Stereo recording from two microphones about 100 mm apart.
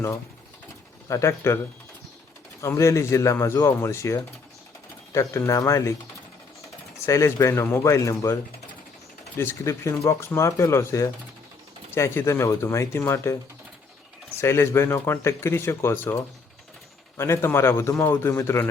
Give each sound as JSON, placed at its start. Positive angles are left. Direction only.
{"t": 1.0, "sound": "speech", "side_deg": 30}
{"t": 2.6, "sound": "speech", "side_deg": 30}
{"t": 7.0, "sound": "speech", "side_deg": 30}
{"t": 9.6, "sound": "speech", "side_deg": 30}
{"t": 14.3, "sound": "speech", "side_deg": 25}
{"t": 17.2, "sound": "speech", "side_deg": 25}